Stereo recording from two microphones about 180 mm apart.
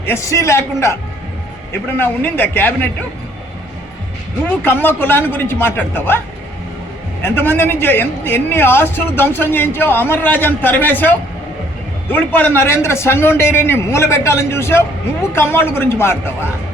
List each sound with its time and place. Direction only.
0.0 s speech: 15° left (ahead or behind)
2.0 s speech: 10° left (ahead or behind)
4.4 s speech: 10° left (ahead or behind)
7.2 s speech: 10° left (ahead or behind)